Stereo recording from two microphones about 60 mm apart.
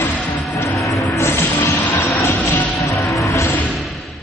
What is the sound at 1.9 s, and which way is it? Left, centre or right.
Train, left.